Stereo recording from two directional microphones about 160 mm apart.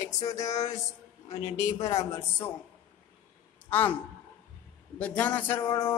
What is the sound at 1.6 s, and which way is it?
Speech, 20° left (ahead or behind).